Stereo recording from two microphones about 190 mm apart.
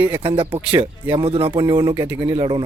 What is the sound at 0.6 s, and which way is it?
Speech, 10° right (ahead or behind).